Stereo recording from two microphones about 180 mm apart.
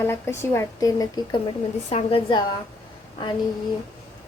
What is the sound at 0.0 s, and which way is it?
A woman's voice, 15° left (ahead or behind).